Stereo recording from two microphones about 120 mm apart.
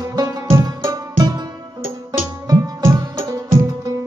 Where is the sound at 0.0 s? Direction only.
30° right (ahead or behind).